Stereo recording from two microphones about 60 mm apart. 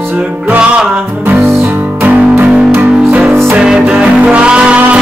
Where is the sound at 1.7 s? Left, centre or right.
Right.